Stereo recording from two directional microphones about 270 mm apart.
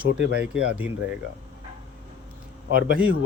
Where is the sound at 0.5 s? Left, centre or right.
Centre.